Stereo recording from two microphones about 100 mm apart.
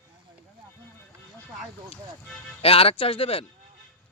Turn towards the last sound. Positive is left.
turn(degrees=65)  # may be behind; listen again after turning